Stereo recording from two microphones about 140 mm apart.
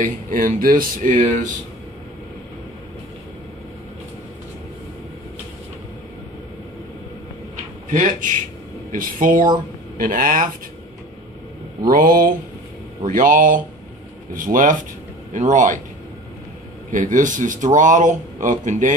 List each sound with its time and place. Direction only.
0.0 s speech: 70° right (ahead or behind)
7.9 s speech: 70° right (ahead or behind)
8.9 s speech: 80° right
9.9 s speech: 90° right
11.9 s speech: 90° right
13.0 s speech: 75° right (ahead or behind)
16.9 s speech: 70° right (ahead or behind)